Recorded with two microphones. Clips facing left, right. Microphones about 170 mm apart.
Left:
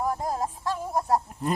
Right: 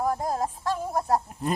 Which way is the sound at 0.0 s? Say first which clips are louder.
Right 1 dB; 40° right (ahead or behind).